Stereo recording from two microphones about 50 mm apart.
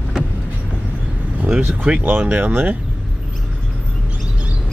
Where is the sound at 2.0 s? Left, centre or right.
Right.